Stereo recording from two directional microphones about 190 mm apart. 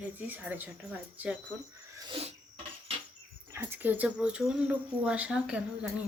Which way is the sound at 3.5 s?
10° right (ahead or behind).